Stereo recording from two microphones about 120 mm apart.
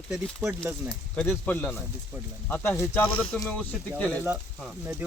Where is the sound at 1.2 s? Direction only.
15° left (ahead or behind).